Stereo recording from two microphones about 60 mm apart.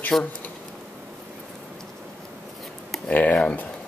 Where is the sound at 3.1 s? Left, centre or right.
Left.